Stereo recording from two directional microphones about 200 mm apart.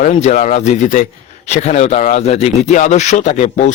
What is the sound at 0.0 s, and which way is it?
Speech, 40° left (ahead or behind).